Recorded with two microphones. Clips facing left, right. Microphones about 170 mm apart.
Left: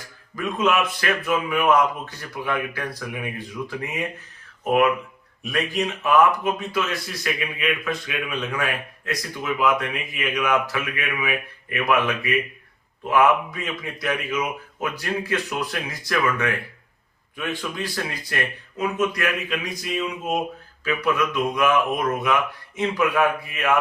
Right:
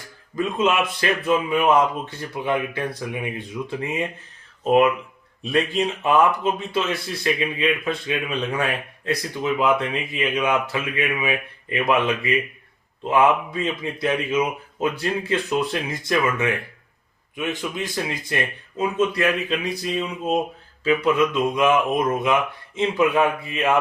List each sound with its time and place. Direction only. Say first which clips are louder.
0.3 s a man's voice: right 1 dB; 25° right (ahead or behind)